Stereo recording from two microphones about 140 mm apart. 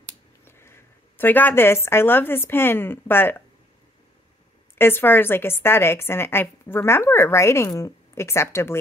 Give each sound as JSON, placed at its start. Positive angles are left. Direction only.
{"t": 0.5, "sound": "a woman's voice", "side_deg": 20}
{"t": 4.7, "sound": "a woman's voice", "side_deg": 15}